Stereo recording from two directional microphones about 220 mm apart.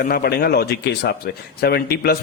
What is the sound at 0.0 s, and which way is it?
A man's voice, 45° left (ahead or behind).